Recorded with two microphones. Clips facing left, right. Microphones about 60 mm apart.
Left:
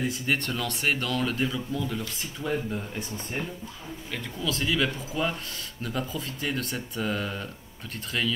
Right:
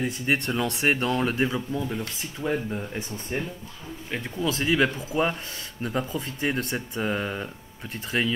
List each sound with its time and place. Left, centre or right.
0.3 s speech: right